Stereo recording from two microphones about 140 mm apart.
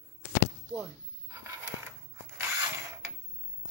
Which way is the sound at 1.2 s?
25° right (ahead or behind).